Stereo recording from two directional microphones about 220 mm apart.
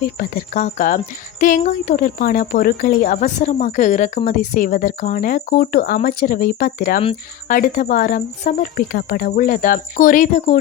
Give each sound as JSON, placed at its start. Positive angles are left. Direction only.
{"t": 0.0, "sound": "speech", "side_deg": 40}